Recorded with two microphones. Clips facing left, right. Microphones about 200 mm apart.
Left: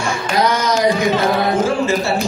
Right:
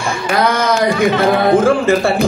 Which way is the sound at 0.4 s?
55° right (ahead or behind).